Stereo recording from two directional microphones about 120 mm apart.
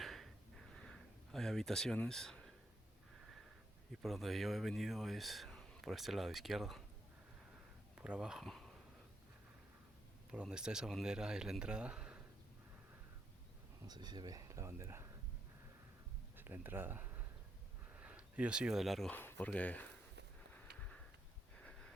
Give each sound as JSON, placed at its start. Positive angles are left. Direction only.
{"t": 0.0, "sound": "a sound", "side_deg": 0}
{"t": 4.0, "sound": "speech", "side_deg": 0}
{"t": 7.9, "sound": "speech", "side_deg": -5}
{"t": 10.5, "sound": "speech", "side_deg": -5}
{"t": 13.8, "sound": "speech", "side_deg": -35}
{"t": 16.4, "sound": "speech", "side_deg": -15}
{"t": 19.1, "sound": "speech", "side_deg": 15}
{"t": 20.5, "sound": "a sound", "side_deg": 10}